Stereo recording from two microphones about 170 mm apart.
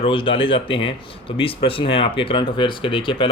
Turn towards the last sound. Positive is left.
turn(degrees=30)  # may be behind; listen again after turning